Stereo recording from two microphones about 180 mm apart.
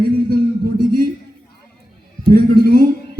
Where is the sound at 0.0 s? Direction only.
55° right (ahead or behind).